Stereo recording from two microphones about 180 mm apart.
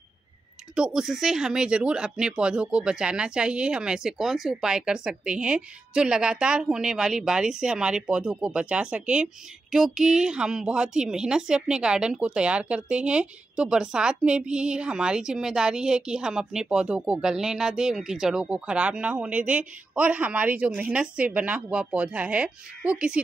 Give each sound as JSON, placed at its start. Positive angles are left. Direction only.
{"t": 0.7, "sound": "speech", "side_deg": -5}